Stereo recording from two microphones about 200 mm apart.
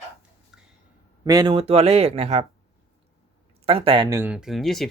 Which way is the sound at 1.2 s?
20° right (ahead or behind).